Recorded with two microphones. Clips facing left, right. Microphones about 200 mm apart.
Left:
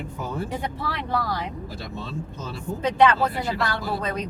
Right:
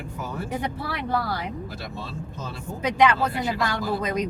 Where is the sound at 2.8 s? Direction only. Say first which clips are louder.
Left 1 dB; 10° right (ahead or behind).